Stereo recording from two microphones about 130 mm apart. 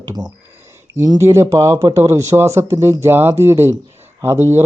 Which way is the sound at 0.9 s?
25° right (ahead or behind).